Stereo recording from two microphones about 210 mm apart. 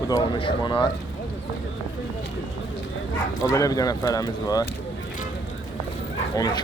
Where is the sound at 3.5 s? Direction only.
15° left (ahead or behind).